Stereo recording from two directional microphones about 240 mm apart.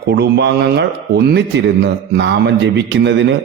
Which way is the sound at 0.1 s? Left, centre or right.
Right.